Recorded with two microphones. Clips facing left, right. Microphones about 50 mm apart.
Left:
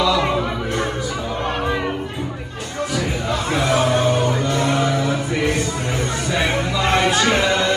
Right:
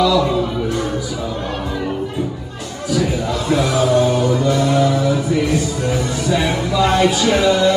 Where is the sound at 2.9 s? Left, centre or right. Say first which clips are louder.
Right 6 dB; left.